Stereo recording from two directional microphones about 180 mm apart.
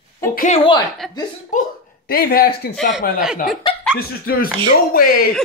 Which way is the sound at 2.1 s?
55° left (ahead or behind).